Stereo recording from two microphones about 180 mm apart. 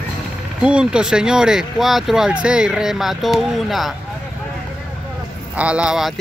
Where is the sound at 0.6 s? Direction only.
5° right (ahead or behind).